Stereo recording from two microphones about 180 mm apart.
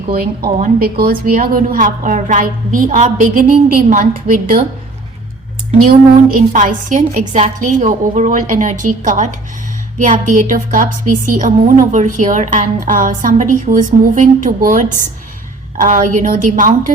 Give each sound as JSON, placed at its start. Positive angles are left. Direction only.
{"t": 0.1, "sound": "a woman's voice", "side_deg": -55}
{"t": 6.3, "sound": "a woman's voice", "side_deg": -50}